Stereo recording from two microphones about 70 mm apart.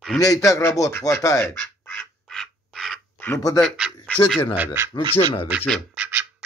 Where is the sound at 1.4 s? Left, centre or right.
Left.